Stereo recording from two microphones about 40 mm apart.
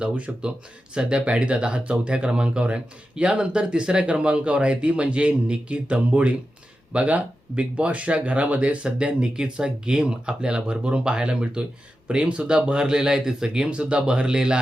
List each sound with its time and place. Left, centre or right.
0.3 s speech: right
13.7 s speech: right